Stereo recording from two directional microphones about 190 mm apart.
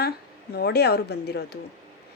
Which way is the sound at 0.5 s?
55° left (ahead or behind).